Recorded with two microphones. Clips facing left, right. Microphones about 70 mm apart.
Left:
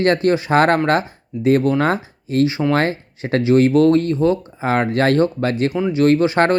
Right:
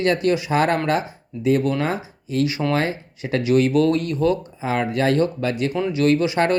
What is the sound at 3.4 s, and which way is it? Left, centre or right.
Speech, left.